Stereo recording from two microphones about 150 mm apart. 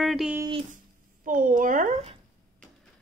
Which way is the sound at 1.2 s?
60° right (ahead or behind).